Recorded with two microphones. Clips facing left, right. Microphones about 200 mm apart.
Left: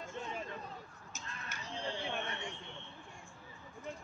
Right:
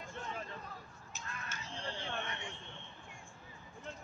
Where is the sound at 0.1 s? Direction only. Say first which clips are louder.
Left 1 dB; 20° left (ahead or behind).